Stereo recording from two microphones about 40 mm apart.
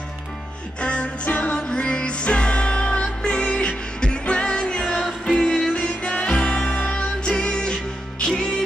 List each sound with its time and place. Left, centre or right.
0.7 s music: left
1.6 s music: left